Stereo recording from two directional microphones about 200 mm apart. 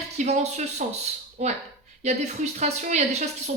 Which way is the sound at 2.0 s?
35° right (ahead or behind).